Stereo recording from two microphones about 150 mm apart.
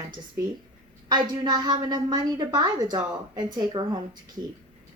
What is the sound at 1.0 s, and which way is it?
Speech, 25° right (ahead or behind).